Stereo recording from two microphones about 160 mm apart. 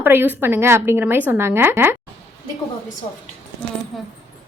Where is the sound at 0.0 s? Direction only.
15° right (ahead or behind).